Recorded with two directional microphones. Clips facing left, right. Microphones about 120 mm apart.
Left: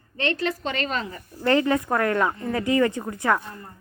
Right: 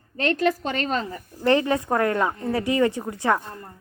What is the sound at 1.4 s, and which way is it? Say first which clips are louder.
A woman's voice: even; 20° right (ahead or behind).